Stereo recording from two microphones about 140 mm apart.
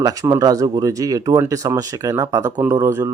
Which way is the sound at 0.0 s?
25° right (ahead or behind).